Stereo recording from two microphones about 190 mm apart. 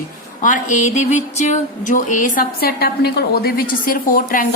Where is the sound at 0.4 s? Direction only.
40° left (ahead or behind).